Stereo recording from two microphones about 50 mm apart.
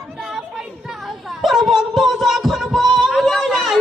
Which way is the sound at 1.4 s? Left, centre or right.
Centre.